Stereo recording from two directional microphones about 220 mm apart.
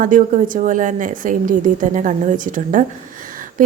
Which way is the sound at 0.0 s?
35° right (ahead or behind).